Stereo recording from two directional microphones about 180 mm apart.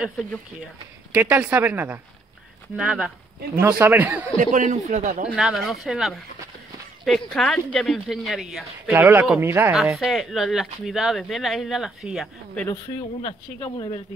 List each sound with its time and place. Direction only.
1.1 s speech: 10° right (ahead or behind)
4.4 s speech: 45° right (ahead or behind)
5.2 s speech: 5° right (ahead or behind)
9.9 s speech: centre (ahead or behind)
13.7 s speech: 25° left (ahead or behind)